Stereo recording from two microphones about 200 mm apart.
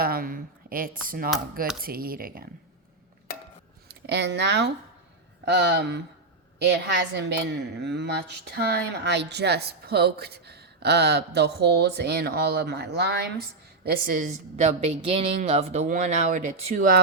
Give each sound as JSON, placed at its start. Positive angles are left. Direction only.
{"t": 0.0, "sound": "a sound", "side_deg": -45}
{"t": 1.0, "sound": "speech", "side_deg": -45}
{"t": 3.8, "sound": "a woman's voice", "side_deg": -55}
{"t": 13.8, "sound": "speech", "side_deg": -40}